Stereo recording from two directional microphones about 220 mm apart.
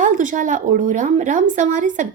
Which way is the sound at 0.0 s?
35° right (ahead or behind).